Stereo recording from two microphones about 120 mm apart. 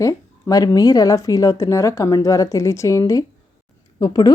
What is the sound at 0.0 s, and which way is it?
A woman's voice, 30° left (ahead or behind).